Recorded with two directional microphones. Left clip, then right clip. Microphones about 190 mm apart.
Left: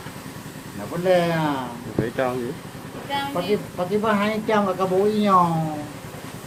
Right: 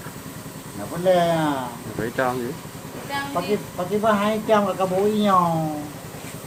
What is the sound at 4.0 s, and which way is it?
Speech, 40° left (ahead or behind).